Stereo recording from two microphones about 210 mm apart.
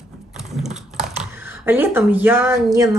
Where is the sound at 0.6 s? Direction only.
35° right (ahead or behind).